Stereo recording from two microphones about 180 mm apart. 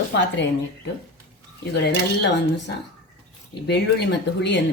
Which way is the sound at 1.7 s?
70° left (ahead or behind).